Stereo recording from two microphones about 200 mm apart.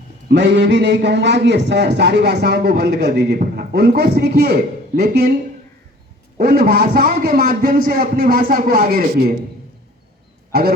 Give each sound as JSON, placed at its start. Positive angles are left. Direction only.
{"t": 0.3, "sound": "a man's voice", "side_deg": -60}
{"t": 6.3, "sound": "a man's voice", "side_deg": -50}
{"t": 10.5, "sound": "speech", "side_deg": -50}